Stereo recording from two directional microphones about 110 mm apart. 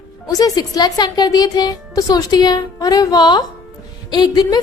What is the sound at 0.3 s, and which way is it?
A woman's voice, 35° left (ahead or behind).